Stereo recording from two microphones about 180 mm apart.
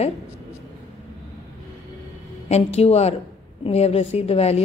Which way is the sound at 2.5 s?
35° left (ahead or behind).